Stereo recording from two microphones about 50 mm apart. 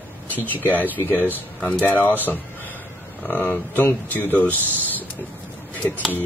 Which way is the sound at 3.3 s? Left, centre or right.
Left.